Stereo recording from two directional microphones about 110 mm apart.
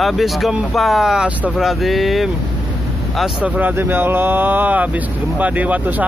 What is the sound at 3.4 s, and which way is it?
Speech, 15° right (ahead or behind).